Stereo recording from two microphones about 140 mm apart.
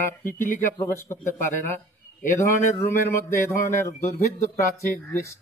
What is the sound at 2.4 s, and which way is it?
Speech, 20° left (ahead or behind).